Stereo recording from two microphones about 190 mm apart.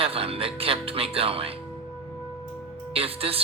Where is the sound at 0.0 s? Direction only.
30° right (ahead or behind).